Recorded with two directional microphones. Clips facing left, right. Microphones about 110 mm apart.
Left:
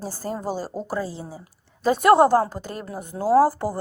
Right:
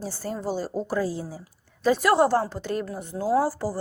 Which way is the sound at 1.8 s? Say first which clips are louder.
Left 4 dB; 50° left (ahead or behind).